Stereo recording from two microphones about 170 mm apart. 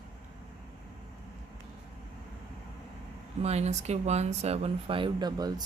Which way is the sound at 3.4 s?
40° right (ahead or behind).